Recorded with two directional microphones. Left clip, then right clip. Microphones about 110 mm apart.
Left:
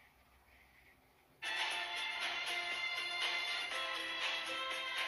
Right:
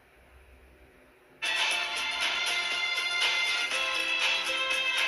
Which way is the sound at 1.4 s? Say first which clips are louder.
Right 11 dB; 25° right (ahead or behind).